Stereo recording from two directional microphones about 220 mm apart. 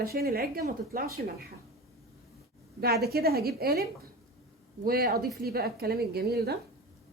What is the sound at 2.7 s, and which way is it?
Speech, 45° right (ahead or behind).